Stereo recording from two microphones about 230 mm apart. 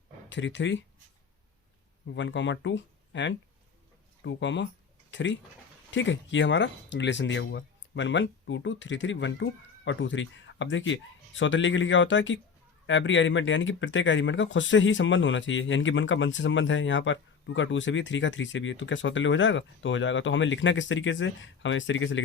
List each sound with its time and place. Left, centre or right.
0.3 s speech: left
2.0 s speech: left